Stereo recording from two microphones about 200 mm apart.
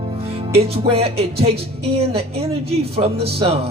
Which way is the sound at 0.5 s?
30° right (ahead or behind).